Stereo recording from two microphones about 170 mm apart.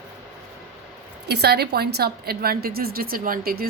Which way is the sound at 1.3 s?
70° right (ahead or behind).